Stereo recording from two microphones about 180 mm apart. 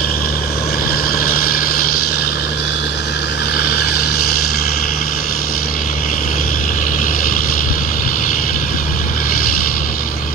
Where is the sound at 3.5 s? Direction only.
60° left (ahead or behind).